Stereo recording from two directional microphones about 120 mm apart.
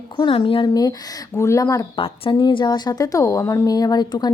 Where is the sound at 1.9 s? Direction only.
50° left (ahead or behind).